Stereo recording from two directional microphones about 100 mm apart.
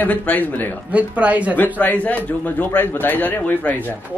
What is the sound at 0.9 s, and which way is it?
Speech, 15° right (ahead or behind).